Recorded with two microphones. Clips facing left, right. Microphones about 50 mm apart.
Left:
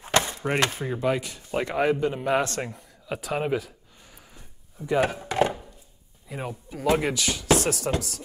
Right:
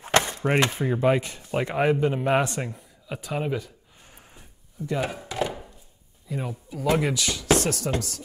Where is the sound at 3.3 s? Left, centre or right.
Centre.